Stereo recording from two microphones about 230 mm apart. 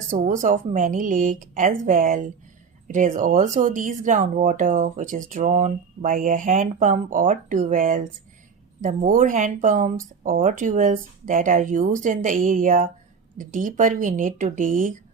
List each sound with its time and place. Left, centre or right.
0.1 s speech: right